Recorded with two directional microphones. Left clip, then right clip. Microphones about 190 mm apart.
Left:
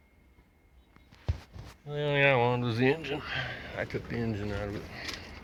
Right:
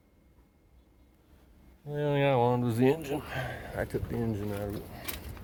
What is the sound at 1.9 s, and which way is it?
Speech, 35° right (ahead or behind).